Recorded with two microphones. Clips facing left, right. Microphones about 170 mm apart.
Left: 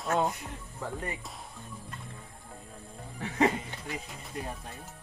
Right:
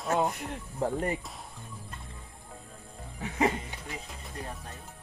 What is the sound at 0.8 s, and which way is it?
Speech, 35° right (ahead or behind).